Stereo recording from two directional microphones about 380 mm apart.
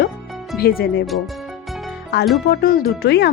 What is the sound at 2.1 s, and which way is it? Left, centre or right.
Speech, left.